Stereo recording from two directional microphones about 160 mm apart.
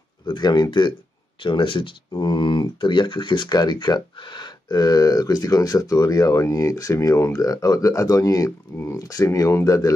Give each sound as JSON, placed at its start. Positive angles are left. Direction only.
{"t": 0.3, "sound": "speech", "side_deg": 25}